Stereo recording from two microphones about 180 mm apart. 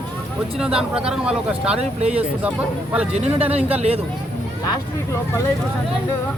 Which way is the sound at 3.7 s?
35° right (ahead or behind).